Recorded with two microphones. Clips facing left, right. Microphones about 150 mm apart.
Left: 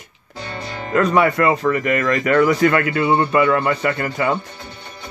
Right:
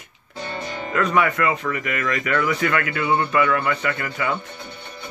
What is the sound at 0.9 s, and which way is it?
Speech, 35° left (ahead or behind).